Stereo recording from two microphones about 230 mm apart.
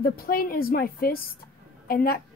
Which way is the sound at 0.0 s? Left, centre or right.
Left.